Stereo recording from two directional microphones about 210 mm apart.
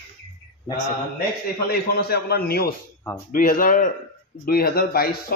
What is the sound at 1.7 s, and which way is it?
Speech, 50° left (ahead or behind).